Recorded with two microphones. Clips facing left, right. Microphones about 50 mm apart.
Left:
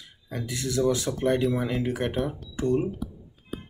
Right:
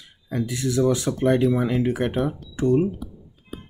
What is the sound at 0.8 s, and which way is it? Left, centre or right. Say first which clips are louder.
Speech: right 3 dB; right.